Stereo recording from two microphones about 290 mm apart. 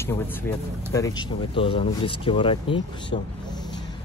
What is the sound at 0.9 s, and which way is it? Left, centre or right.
Speech, centre.